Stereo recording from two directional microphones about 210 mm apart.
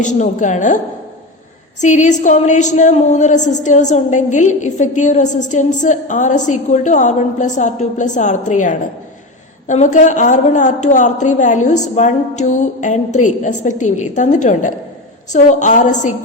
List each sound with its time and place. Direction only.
0.0 s a woman's voice: 35° left (ahead or behind)
1.8 s a woman's voice: 35° left (ahead or behind)